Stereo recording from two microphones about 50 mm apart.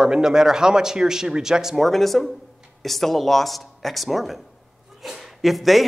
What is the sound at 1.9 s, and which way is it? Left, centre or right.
Speech, centre.